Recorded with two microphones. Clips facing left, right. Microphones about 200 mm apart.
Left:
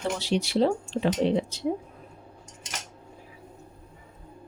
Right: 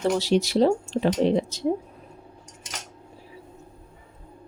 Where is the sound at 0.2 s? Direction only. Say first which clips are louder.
Right 4 dB; 40° right (ahead or behind).